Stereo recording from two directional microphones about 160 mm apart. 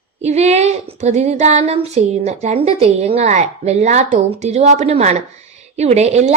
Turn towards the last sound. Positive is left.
turn(degrees=-45)  # may be behind; listen again after turning